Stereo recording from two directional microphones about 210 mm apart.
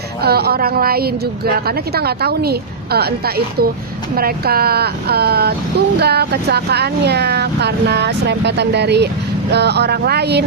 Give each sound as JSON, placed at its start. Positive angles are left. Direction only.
{"t": 0.2, "sound": "speech", "side_deg": -50}